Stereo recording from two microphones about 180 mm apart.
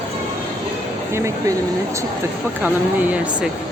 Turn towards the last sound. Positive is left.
turn(degrees=-5)  # may be behind; listen again after turning